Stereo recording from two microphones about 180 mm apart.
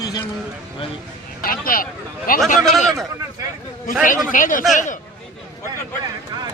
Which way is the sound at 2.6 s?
Centre (ahead or behind).